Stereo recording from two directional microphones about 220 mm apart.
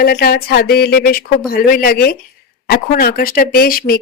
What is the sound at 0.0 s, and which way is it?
A woman's voice, 45° left (ahead or behind).